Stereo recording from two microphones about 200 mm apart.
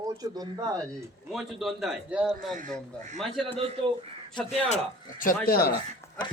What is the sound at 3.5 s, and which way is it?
Speech, 30° right (ahead or behind).